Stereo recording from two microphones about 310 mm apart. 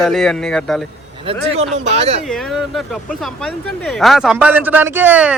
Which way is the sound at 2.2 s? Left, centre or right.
Centre.